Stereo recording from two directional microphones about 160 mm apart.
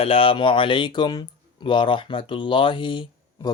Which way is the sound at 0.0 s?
35° left (ahead or behind).